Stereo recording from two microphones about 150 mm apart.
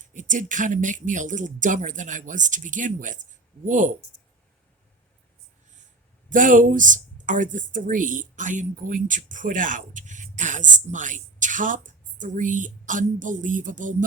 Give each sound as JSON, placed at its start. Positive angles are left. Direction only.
{"t": 0.0, "sound": "speech", "side_deg": -60}
{"t": 6.3, "sound": "speech", "side_deg": -60}